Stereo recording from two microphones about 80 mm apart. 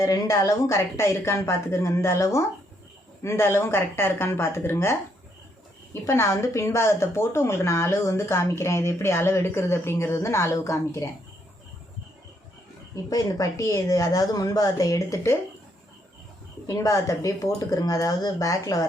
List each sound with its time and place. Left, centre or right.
0.0 s a woman's voice: left
13.1 s speech: left
16.6 s speech: left